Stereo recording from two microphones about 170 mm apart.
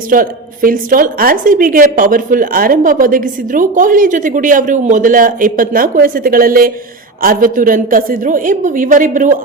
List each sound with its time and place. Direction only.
0.1 s a woman's voice: 55° right (ahead or behind)